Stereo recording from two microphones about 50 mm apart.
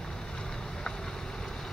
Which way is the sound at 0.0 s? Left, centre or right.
Centre.